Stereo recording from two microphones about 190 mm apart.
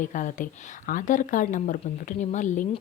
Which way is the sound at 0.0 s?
40° left (ahead or behind).